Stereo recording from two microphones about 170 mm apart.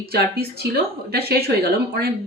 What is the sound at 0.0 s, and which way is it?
Speech, 65° right (ahead or behind).